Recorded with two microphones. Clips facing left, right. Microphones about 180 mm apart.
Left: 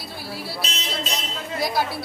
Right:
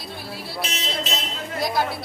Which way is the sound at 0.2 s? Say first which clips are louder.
Left 5 dB; 5° left (ahead or behind).